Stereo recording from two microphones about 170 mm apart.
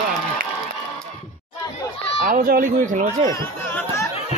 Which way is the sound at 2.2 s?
55° right (ahead or behind).